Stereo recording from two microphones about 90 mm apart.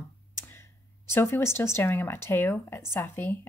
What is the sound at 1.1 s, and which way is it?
Speech, 30° left (ahead or behind).